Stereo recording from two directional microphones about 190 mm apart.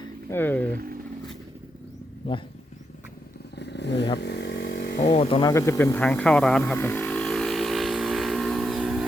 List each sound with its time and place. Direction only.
0.0 s speech: 10° left (ahead or behind)
2.3 s speech: 25° left (ahead or behind)
3.6 s vehicle: 65° left (ahead or behind)
4.2 s chainsaw: 60° left (ahead or behind)
5.0 s speech: 35° left (ahead or behind)
5.4 s vehicle: 15° left (ahead or behind); by 9.0 s centre (ahead or behind)